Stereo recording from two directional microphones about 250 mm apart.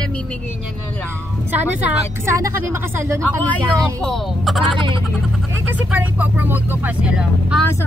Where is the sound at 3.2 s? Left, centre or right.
Centre.